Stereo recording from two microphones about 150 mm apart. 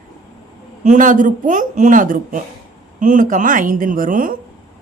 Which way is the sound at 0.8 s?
55° right (ahead or behind).